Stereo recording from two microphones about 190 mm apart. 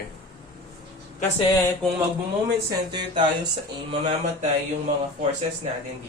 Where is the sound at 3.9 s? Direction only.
40° right (ahead or behind).